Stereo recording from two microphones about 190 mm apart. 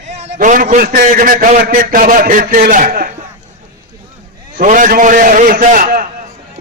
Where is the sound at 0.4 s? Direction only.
40° right (ahead or behind).